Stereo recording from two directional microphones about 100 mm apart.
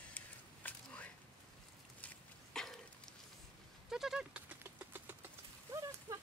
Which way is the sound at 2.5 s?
5° left (ahead or behind).